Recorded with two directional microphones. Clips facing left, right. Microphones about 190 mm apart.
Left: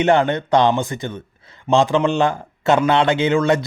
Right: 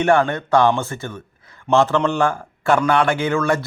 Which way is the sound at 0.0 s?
20° left (ahead or behind).